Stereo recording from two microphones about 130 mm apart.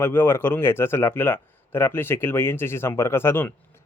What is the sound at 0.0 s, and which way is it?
Speech, 20° left (ahead or behind).